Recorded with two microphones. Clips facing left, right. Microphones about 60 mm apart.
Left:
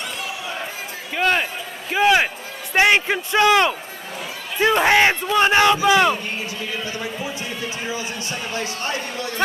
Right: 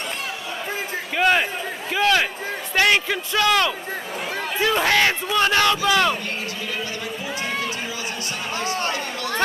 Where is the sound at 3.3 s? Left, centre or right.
Left.